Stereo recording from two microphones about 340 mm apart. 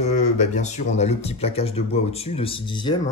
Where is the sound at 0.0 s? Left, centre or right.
Centre.